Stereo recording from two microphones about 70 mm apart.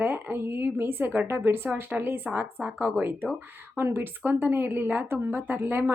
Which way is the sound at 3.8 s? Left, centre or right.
Right.